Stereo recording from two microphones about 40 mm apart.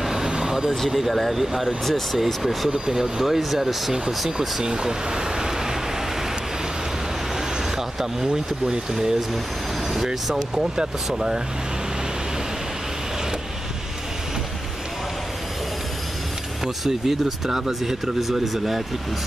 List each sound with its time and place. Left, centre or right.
0.0 s vehicle: centre
0.8 s speech: centre
7.7 s speech: centre
10.6 s speech: centre
16.8 s speech: centre